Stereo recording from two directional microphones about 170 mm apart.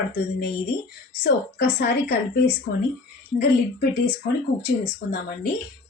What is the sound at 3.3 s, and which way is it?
Speech, 50° left (ahead or behind).